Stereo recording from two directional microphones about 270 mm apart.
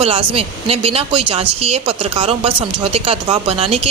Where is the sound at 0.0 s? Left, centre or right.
Right.